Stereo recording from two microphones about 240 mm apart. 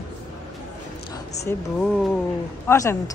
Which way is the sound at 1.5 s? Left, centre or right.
Centre.